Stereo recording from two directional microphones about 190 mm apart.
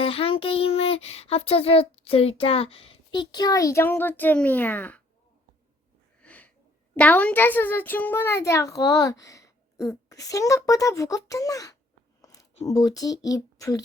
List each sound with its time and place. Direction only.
0.0 s child singing: 30° left (ahead or behind); by 5.0 s 10° left (ahead or behind)
6.2 s sniff: 10° left (ahead or behind)
6.9 s a child's voice: 10° left (ahead or behind)
12.2 s a sound: 20° left (ahead or behind)
12.6 s child singing: 20° left (ahead or behind)